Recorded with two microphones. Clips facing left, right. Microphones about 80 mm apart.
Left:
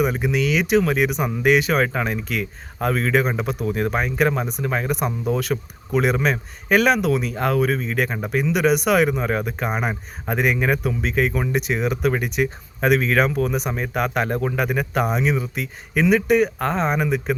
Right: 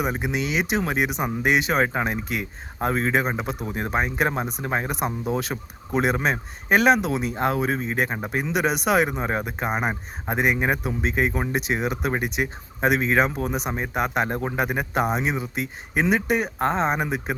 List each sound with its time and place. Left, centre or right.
0.0 s speech: right